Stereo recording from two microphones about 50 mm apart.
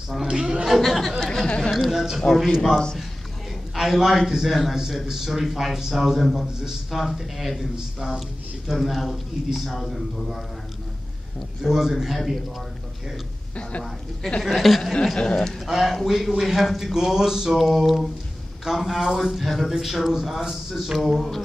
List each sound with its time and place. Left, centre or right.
0.3 s a sound: centre
0.7 s a man's voice: centre
1.7 s a man's voice: centre
2.2 s speech: centre
3.7 s a man's voice: centre
7.7 s a sound: centre
8.6 s a man's voice: centre
11.6 s a sound: centre
13.6 s speech: left
14.4 s a man's voice: centre
14.8 s speech: centre
15.6 s a man's voice: centre
16.9 s a sound: centre
18.6 s a man's voice: centre